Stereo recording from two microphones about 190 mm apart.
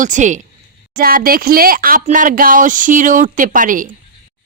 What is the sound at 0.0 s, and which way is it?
Speech, 40° right (ahead or behind).